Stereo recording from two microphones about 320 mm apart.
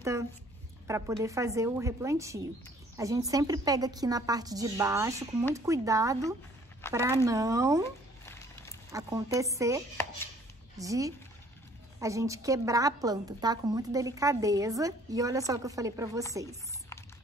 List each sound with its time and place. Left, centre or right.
0.8 s a woman's voice: centre
8.9 s a woman's voice: centre
10.8 s a woman's voice: centre